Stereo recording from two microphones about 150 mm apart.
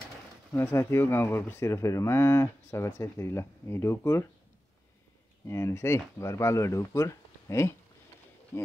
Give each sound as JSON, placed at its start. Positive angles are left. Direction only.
{"t": 0.5, "sound": "speech", "side_deg": 15}
{"t": 5.5, "sound": "speech", "side_deg": 20}